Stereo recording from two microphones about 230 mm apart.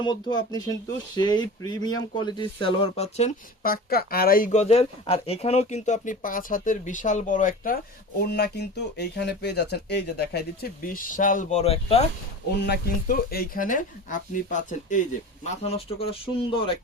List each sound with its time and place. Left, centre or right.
0.0 s speech: centre
12.5 s speech: left